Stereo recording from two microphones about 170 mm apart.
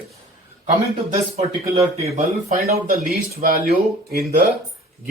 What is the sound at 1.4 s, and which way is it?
A man's voice, 35° right (ahead or behind).